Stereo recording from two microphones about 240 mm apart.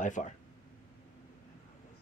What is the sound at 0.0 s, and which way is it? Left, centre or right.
Speech, left.